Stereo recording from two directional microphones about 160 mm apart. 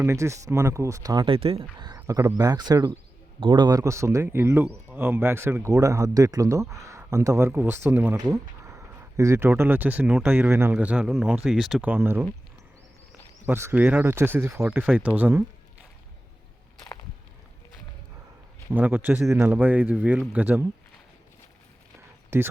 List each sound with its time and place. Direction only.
0.0 s speech: 20° right (ahead or behind); by 1.6 s 35° right (ahead or behind)
2.0 s a man's voice: 20° right (ahead or behind)
8.1 s a sound: 20° right (ahead or behind)
9.6 s a man's voice: 10° right (ahead or behind)
13.4 s a man's voice: 15° right (ahead or behind)
18.7 s a man's voice: 10° right (ahead or behind)